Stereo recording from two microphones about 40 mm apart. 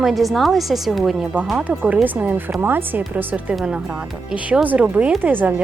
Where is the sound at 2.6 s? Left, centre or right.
Right.